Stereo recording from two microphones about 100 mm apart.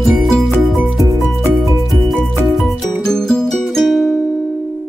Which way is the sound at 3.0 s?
5° left (ahead or behind).